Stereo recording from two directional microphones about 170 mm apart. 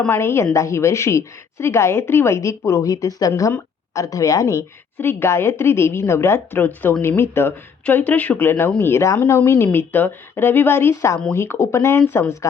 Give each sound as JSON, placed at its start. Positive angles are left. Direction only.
{"t": 0.0, "sound": "a woman's voice", "side_deg": 15}